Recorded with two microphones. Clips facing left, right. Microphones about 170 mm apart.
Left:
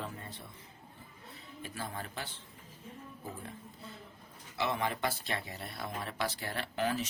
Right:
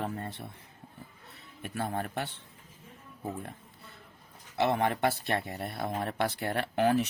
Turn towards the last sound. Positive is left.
turn(degrees=-60)  # may be behind; listen again after turning